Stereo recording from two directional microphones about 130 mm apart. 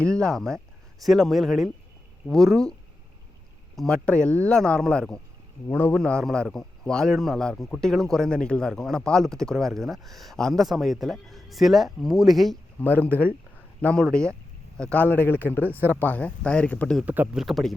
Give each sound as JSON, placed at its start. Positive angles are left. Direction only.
{"t": 0.0, "sound": "a man's voice", "side_deg": 5}
{"t": 3.8, "sound": "a man's voice", "side_deg": 5}
{"t": 12.8, "sound": "speech", "side_deg": 15}
{"t": 17.1, "sound": "speech", "side_deg": -10}
{"t": 17.4, "sound": "a man's voice", "side_deg": 0}